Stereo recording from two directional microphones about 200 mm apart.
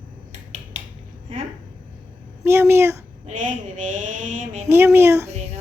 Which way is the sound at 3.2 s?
40° right (ahead or behind).